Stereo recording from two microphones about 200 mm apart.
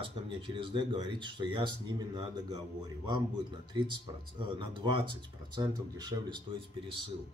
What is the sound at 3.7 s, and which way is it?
Speech, 25° right (ahead or behind).